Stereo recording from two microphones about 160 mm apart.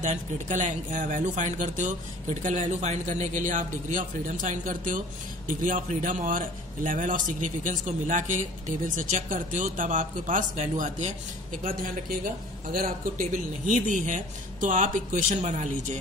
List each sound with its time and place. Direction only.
0.0 s a man's voice: 50° right (ahead or behind)